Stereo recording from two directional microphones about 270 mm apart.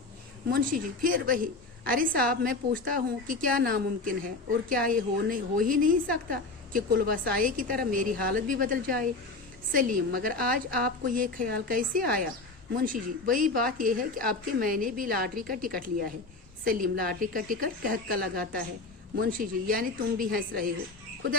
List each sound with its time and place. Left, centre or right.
0.5 s a woman's voice: right